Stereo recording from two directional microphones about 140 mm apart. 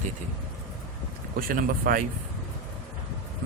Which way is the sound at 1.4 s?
90° right.